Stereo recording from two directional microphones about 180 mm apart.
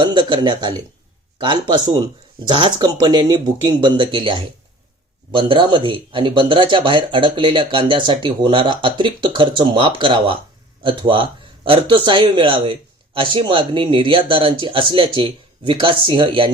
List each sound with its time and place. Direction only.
0.0 s speech: 25° right (ahead or behind)